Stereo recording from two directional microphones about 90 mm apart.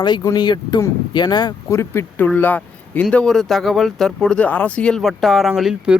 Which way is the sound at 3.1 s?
5° left (ahead or behind).